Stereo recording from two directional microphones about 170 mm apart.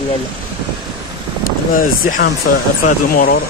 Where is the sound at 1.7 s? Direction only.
55° left (ahead or behind).